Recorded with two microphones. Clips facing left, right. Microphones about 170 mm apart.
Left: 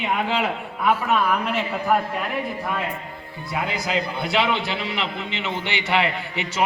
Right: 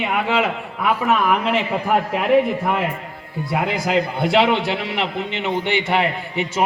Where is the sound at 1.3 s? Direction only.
90° right.